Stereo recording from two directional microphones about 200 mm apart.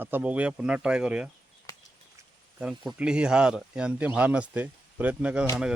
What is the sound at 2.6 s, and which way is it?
Speech, 5° right (ahead or behind).